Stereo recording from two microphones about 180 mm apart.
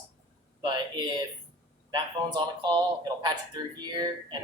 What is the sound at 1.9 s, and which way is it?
Speech, 25° right (ahead or behind).